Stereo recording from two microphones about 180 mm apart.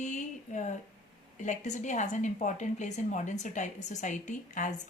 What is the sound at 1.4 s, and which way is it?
A woman's voice, 40° left (ahead or behind).